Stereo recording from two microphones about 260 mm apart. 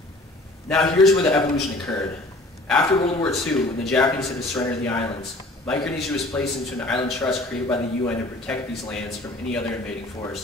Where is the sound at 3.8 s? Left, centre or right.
Centre.